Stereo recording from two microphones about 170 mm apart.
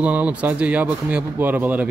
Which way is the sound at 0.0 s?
10° right (ahead or behind).